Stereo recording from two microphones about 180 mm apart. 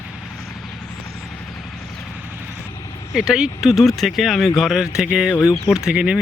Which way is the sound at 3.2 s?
5° right (ahead or behind).